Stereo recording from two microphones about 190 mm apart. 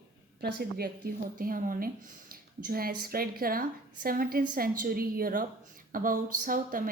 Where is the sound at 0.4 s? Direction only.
55° right (ahead or behind).